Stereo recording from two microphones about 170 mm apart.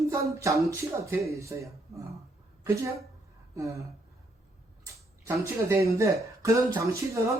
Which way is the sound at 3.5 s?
20° right (ahead or behind).